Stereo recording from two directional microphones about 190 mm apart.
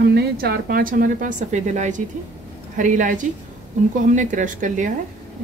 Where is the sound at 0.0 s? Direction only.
60° right (ahead or behind).